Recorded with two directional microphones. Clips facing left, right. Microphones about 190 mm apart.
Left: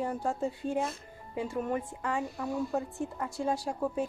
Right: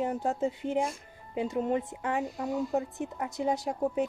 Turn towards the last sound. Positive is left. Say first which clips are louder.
# right 2 dB
turn(degrees=-20)  # may be behind; listen again after turning